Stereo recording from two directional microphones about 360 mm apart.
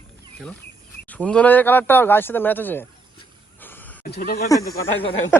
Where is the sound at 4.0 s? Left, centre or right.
Left.